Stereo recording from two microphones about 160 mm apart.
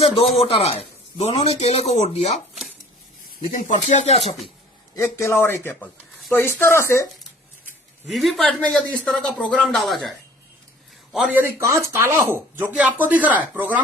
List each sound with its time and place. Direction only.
0.0 s speech: 35° left (ahead or behind)
3.4 s speech: 50° left (ahead or behind)
4.9 s speech: 15° left (ahead or behind)
8.0 s speech: centre (ahead or behind)